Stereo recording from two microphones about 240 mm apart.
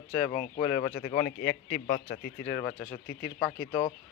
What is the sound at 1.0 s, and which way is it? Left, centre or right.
Speech, left.